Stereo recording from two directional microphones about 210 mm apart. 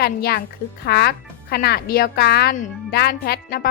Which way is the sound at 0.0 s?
50° left (ahead or behind).